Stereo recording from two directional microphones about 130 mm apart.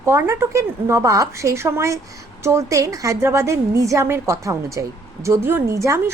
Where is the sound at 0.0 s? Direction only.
20° right (ahead or behind).